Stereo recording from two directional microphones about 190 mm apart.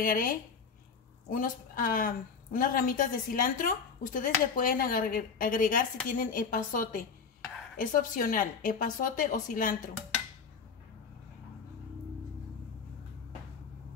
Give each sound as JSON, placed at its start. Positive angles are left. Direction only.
{"t": 0.0, "sound": "a woman's voice", "side_deg": 45}